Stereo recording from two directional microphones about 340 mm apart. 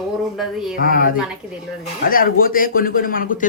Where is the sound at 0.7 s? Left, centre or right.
Left.